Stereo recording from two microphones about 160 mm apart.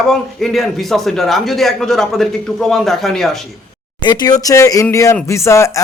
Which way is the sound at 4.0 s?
25° left (ahead or behind).